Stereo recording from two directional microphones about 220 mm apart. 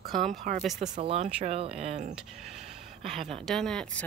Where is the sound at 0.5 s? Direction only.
35° right (ahead or behind).